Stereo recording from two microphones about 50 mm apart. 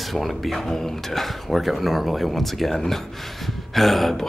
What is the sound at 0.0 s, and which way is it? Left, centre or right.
Speech, centre.